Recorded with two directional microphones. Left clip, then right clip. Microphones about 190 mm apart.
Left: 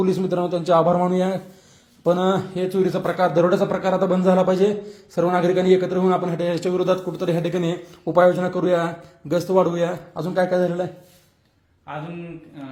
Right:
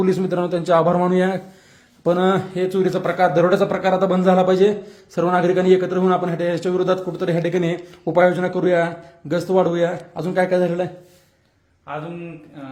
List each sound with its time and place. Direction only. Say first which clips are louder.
0.0 s speech: right 2 dB; 10° right (ahead or behind)
6.6 s a man's voice: right 2 dB; 25° right (ahead or behind)
7.2 s speech: right 2 dB; 10° right (ahead or behind)